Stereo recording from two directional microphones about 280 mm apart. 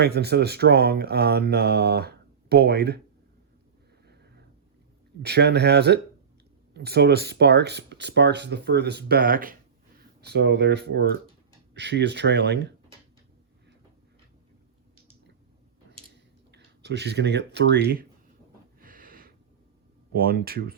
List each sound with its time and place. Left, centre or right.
0.0 s speech: right
4.0 s sniff: right
5.2 s speech: right
16.5 s speech: right
18.8 s a sound: right
20.1 s speech: right